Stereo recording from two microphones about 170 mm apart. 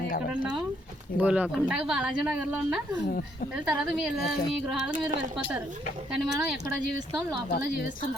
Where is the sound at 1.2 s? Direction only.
5° right (ahead or behind).